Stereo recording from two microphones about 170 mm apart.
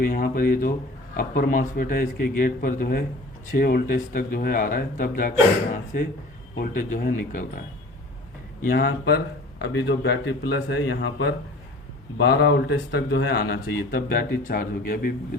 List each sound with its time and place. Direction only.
0.0 s speech: 55° left (ahead or behind)
8.6 s speech: 65° left (ahead or behind); by 11.3 s 90° left
12.1 s speech: 80° left; by 15.1 s 55° left (ahead or behind)